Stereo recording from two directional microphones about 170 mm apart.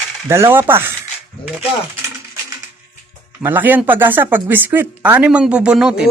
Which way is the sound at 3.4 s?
10° right (ahead or behind).